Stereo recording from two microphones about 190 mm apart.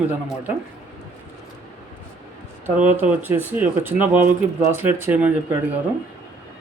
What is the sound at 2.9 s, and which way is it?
A man's voice, 10° right (ahead or behind).